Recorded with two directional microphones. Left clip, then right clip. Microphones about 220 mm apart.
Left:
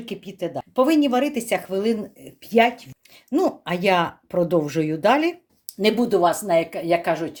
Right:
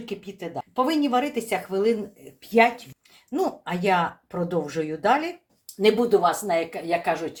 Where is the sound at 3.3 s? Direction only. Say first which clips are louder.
Left 4 dB; 50° left (ahead or behind).